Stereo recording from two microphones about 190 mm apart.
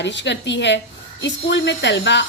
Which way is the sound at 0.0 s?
70° left (ahead or behind).